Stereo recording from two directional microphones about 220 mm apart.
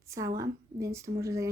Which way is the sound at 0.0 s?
15° right (ahead or behind).